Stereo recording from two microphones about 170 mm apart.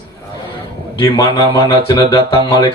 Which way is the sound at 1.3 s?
30° left (ahead or behind).